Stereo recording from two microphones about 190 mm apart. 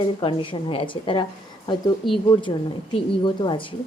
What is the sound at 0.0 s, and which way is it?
A woman's voice, 25° left (ahead or behind).